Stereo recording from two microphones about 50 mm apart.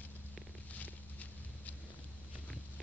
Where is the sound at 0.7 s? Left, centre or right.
Left.